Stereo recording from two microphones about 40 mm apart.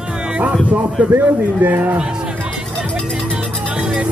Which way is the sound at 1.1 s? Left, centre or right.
Right.